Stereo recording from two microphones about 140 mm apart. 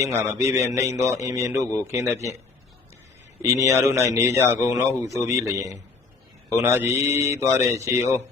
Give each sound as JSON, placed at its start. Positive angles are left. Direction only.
{"t": 0.0, "sound": "a man's voice", "side_deg": -20}
{"t": 3.4, "sound": "a man's voice", "side_deg": -20}